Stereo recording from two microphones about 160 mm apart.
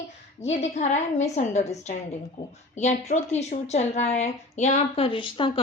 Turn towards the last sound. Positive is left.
turn(degrees=30)  # may be behind; listen again after turning